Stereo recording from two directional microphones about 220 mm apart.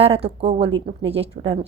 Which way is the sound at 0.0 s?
25° right (ahead or behind).